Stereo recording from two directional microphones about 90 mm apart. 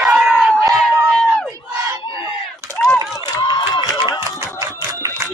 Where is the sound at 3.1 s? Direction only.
45° left (ahead or behind).